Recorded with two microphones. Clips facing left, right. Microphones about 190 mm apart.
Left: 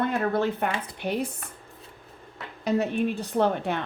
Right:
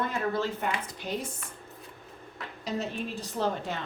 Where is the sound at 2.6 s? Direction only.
60° left (ahead or behind).